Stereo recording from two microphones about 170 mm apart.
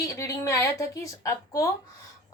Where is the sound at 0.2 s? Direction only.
15° left (ahead or behind).